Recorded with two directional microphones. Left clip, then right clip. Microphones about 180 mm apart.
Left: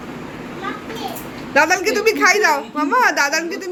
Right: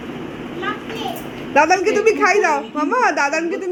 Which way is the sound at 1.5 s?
15° left (ahead or behind).